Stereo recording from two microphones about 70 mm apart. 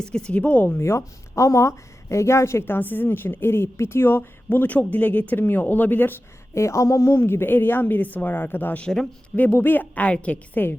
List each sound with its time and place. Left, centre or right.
0.0 s speech: centre
0.8 s a woman's voice: left
4.4 s speech: left
6.5 s speech: left
7.2 s speech: left
8.8 s speech: centre
9.3 s speech: left